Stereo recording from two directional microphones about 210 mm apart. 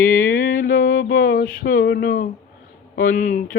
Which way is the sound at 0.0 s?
40° left (ahead or behind).